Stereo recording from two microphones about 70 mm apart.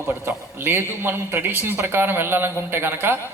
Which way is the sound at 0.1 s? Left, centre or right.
Right.